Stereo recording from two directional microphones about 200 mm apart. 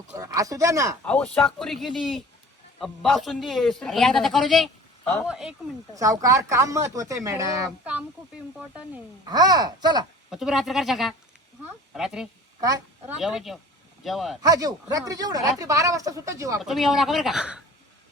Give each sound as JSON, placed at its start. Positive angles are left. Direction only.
{"t": 0.2, "sound": "speech", "side_deg": -15}
{"t": 1.0, "sound": "a man's voice", "side_deg": 5}
{"t": 5.9, "sound": "speech", "side_deg": -15}
{"t": 9.3, "sound": "speech", "side_deg": -20}
{"t": 10.2, "sound": "a man's voice", "side_deg": 0}
{"t": 12.5, "sound": "a woman's voice", "side_deg": -20}
{"t": 13.1, "sound": "a man's voice", "side_deg": 0}
{"t": 14.4, "sound": "speech", "side_deg": -15}
{"t": 16.6, "sound": "a man's voice", "side_deg": 0}